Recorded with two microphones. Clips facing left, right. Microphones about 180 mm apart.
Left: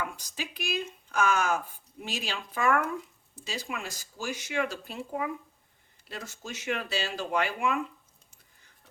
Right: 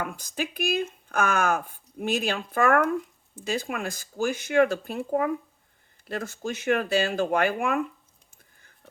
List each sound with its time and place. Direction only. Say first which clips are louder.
0.0 s speech: right 5 dB; 55° right (ahead or behind)